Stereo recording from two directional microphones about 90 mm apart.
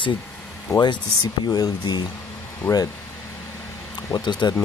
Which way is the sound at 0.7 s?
40° left (ahead or behind).